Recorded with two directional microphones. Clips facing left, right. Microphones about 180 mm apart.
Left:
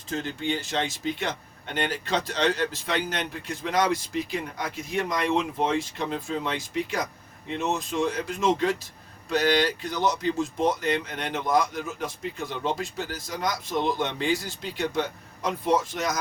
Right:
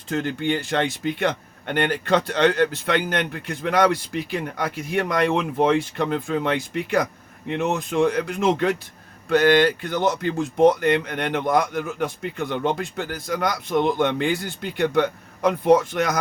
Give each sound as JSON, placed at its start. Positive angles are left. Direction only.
{"t": 0.1, "sound": "speech", "side_deg": -60}